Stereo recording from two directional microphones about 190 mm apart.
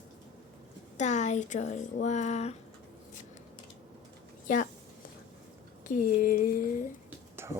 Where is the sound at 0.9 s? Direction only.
40° left (ahead or behind).